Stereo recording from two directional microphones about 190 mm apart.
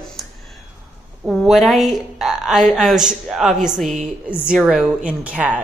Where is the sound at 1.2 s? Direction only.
Centre (ahead or behind).